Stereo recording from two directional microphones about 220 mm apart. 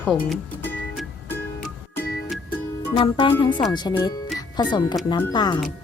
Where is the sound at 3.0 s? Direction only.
20° left (ahead or behind).